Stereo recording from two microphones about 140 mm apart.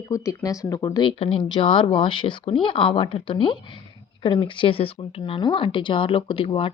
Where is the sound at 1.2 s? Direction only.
45° left (ahead or behind).